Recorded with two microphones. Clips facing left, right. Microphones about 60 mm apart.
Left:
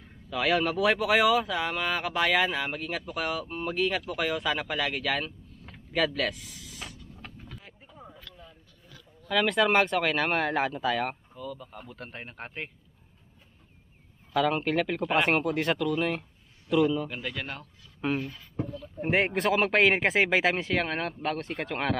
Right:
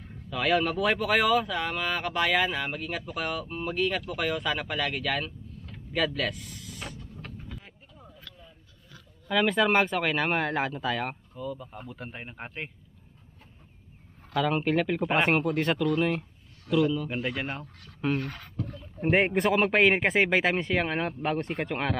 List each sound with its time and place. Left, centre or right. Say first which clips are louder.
0.0 s speech: left 1 dB; centre
7.2 s a sound: even; centre
7.9 s a sound: left 6 dB; left
9.3 s speech: even; centre
14.3 s a man's voice: even; centre
17.1 s speech: right 4 dB; centre
18.2 s speech: right 2 dB; right
19.0 s speech: right 2 dB; centre